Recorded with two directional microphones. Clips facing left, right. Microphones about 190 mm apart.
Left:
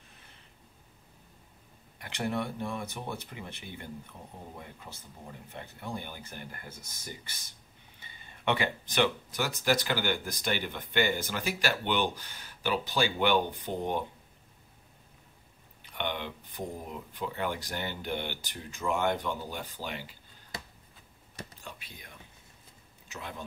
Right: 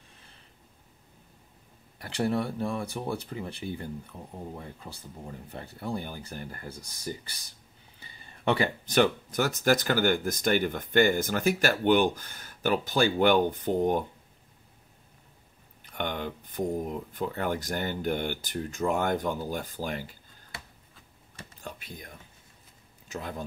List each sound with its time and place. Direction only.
2.0 s speech: 35° right (ahead or behind)
5.5 s speech: 35° right (ahead or behind)
15.8 s a sound: 45° right (ahead or behind)
17.2 s speech: 45° right (ahead or behind)
21.6 s speech: 45° right (ahead or behind)
23.1 s speech: 40° right (ahead or behind)